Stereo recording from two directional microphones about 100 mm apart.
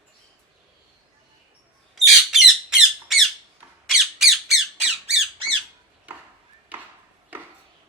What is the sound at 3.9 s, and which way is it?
Squawk, 5° right (ahead or behind).